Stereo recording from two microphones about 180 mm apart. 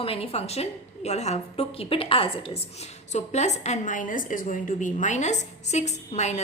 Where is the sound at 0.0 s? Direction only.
30° left (ahead or behind).